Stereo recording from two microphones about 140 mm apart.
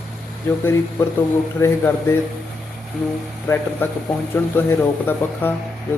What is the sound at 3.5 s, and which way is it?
Speech, 20° left (ahead or behind).